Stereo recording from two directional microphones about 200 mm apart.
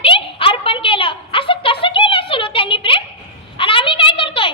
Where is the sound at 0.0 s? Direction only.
25° left (ahead or behind).